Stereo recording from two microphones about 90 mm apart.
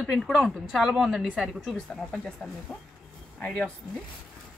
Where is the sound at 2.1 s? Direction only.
10° left (ahead or behind).